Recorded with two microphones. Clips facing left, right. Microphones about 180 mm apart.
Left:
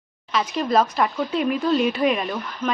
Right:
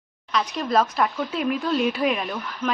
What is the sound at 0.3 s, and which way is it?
Speech, centre (ahead or behind).